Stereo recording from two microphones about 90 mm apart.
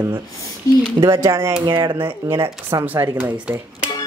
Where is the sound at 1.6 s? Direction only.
60° right (ahead or behind).